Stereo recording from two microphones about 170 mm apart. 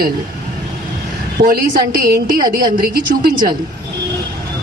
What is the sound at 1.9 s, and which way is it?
Speech, 65° right (ahead or behind).